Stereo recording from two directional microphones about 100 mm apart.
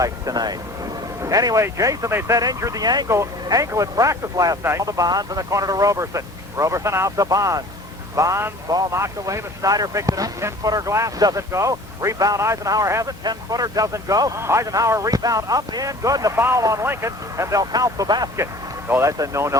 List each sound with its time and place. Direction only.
0.0 s speech: 40° right (ahead or behind)
3.1 s speech: 30° right (ahead or behind)
18.9 s speech: 25° right (ahead or behind)